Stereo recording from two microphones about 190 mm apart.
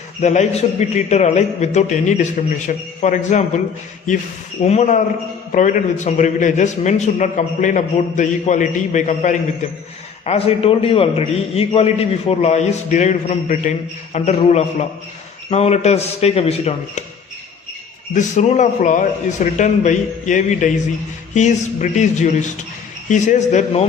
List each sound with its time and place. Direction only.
0.2 s a man's voice: 35° left (ahead or behind)
4.6 s a man's voice: 35° left (ahead or behind)
18.1 s a man's voice: 40° left (ahead or behind)